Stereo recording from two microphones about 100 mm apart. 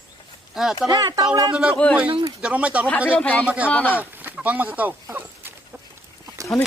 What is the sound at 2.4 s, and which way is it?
Speech, 10° right (ahead or behind).